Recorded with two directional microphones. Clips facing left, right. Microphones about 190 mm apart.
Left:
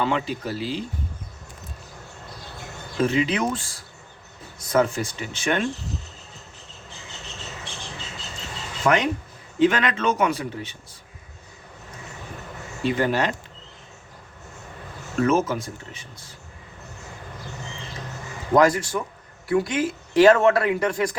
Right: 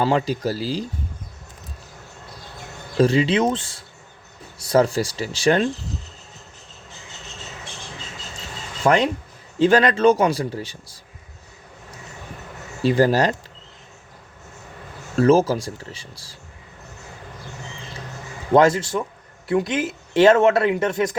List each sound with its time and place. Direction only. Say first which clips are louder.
0.0 s speech: right 5 dB; 35° right (ahead or behind)
3.0 s speech: right 5 dB; 35° right (ahead or behind)
8.8 s speech: right 3 dB; 35° right (ahead or behind)
12.8 s speech: right 5 dB; 35° right (ahead or behind)
15.2 s speech: right 5 dB; 35° right (ahead or behind)
18.5 s speech: right 2 dB; 25° right (ahead or behind)